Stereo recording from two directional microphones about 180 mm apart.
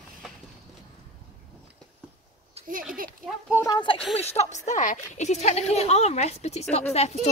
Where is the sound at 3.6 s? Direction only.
25° left (ahead or behind).